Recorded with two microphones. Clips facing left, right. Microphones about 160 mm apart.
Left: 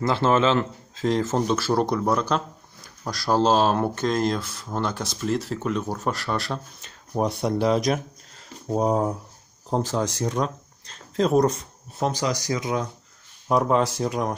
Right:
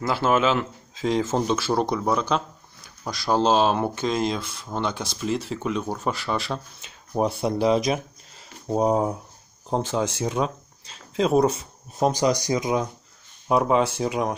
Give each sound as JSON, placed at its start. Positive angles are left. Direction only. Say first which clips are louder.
{"t": 0.0, "sound": "speech", "louder": "left 1 dB", "side_deg": -5}
{"t": 12.1, "sound": "speech", "louder": "right 4 dB", "side_deg": -20}
{"t": 13.5, "sound": "speech", "louder": "even", "side_deg": -5}